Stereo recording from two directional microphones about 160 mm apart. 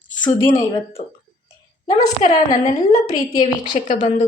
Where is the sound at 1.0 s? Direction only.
40° left (ahead or behind).